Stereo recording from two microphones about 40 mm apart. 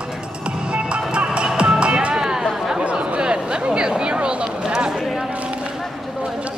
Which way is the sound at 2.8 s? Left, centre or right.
Right.